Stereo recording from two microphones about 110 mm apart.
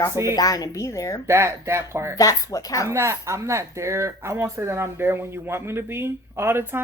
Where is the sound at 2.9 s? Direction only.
25° right (ahead or behind).